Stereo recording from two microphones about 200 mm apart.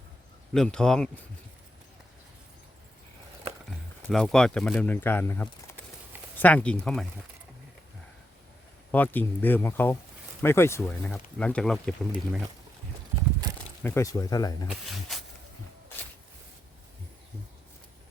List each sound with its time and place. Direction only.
0.5 s speech: 5° left (ahead or behind)
4.1 s speech: 5° left (ahead or behind)
8.9 s speech: 10° left (ahead or behind)
13.8 s speech: 15° left (ahead or behind)
14.7 s snake: centre (ahead or behind)